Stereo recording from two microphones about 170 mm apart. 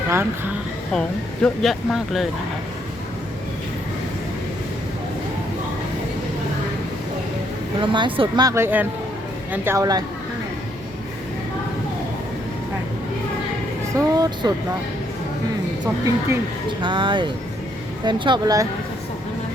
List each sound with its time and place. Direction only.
0.1 s speech: 15° right (ahead or behind)
0.9 s speech: 5° left (ahead or behind)
7.8 s speech: 30° right (ahead or behind)
13.9 s speech: 20° right (ahead or behind)
16.8 s speech: 30° right (ahead or behind)